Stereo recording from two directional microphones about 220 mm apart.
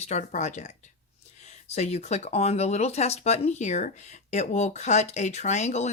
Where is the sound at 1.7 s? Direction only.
30° left (ahead or behind).